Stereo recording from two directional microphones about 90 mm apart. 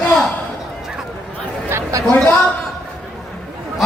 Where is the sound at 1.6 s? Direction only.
30° right (ahead or behind).